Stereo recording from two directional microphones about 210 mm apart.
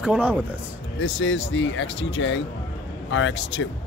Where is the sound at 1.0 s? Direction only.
60° left (ahead or behind).